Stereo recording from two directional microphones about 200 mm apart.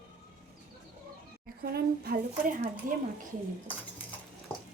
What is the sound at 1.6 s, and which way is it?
Speech, 50° right (ahead or behind).